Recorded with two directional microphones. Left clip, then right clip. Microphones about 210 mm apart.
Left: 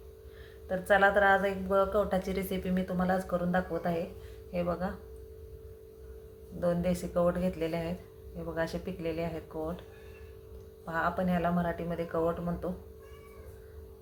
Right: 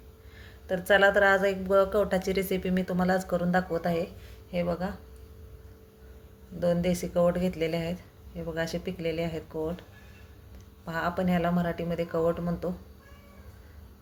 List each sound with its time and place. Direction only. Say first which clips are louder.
0.7 s a woman's voice: right 3 dB; 30° right (ahead or behind)
6.6 s speech: right 3 dB; 30° right (ahead or behind)
10.8 s speech: right 1 dB; 30° right (ahead or behind)